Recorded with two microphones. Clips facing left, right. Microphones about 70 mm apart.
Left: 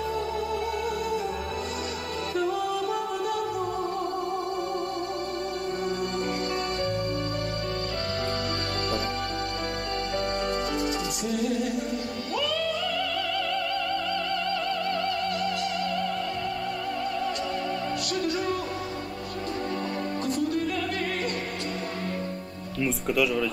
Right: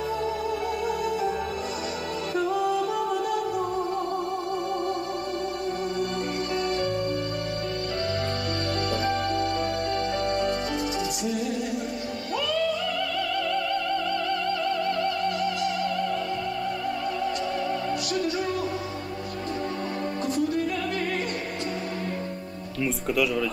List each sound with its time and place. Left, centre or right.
8.9 s music: right
10.8 s music: left
15.2 s music: left
20.2 s music: left
22.8 s speech: centre